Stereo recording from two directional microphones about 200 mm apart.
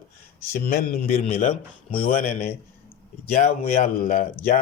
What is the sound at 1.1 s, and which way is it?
Speech, 35° left (ahead or behind).